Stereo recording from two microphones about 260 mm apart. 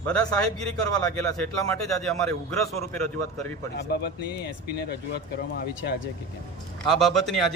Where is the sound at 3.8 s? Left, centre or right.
Left.